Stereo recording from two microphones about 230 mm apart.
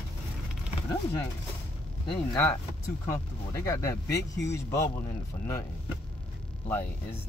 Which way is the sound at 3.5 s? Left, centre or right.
Centre.